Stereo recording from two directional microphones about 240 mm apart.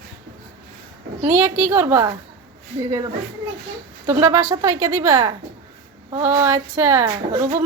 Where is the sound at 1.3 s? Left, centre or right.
Centre.